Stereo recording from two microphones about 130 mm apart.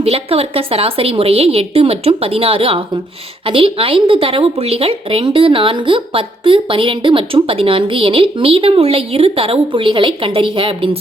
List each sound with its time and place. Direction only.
0.0 s a woman's voice: 50° right (ahead or behind)